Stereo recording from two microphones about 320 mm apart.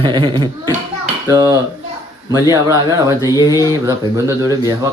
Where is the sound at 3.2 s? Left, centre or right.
Centre.